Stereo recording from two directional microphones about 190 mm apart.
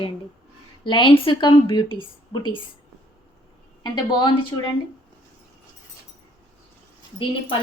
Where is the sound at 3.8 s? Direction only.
25° left (ahead or behind).